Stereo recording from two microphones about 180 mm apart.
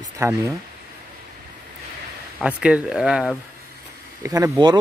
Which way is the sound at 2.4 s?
5° right (ahead or behind).